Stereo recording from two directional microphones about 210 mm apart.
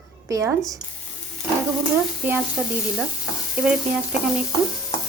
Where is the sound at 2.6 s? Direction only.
Centre (ahead or behind).